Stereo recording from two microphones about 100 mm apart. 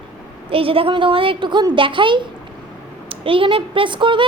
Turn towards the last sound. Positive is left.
turn(degrees=-55)  # may be behind; listen again after turning